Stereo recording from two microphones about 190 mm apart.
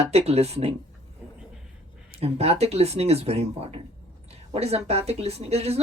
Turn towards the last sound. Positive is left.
turn(degrees=-35)  # may be behind; listen again after turning